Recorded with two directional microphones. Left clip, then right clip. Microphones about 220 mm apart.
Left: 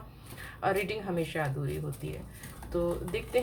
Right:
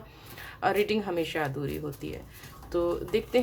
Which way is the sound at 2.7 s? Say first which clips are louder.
Right 4 dB; 45° right (ahead or behind).